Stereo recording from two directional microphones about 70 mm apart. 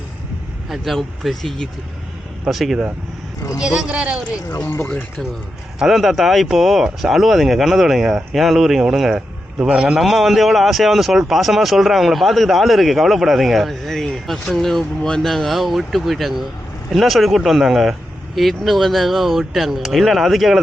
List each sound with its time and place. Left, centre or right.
0.7 s a man's voice: centre
4.6 s speech: left
5.8 s a man's voice: centre
10.0 s a man's voice: centre